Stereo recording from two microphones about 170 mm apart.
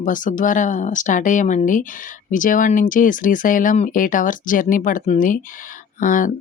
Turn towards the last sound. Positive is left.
turn(degrees=50)  # may be behind; listen again after turning